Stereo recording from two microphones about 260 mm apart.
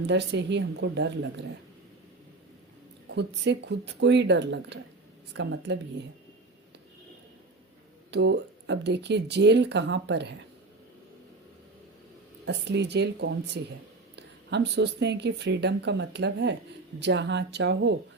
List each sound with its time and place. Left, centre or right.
0.1 s a woman's voice: right
3.1 s a woman's voice: right
8.1 s speech: right
12.5 s a woman's voice: right